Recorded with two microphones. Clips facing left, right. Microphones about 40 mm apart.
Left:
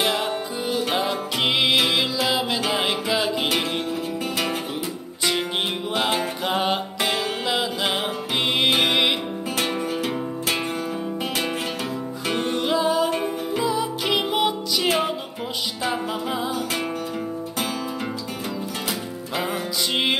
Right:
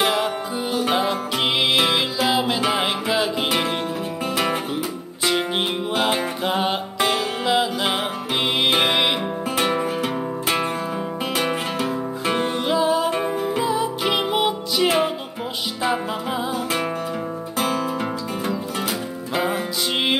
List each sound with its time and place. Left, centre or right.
0.0 s music: centre
5.3 s music: centre
5.9 s music: centre
6.5 s music: centre
8.9 s music: centre
9.6 s music: centre
19.9 s music: centre